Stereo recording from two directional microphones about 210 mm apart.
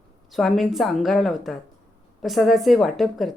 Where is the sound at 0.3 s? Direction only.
Centre (ahead or behind).